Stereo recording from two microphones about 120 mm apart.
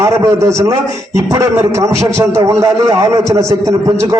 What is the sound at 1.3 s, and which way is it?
A man's voice, 25° right (ahead or behind).